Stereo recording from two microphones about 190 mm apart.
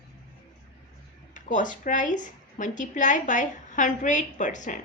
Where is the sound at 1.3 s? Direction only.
40° left (ahead or behind).